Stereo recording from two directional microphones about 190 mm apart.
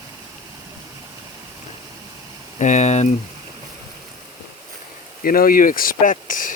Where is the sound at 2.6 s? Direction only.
40° left (ahead or behind).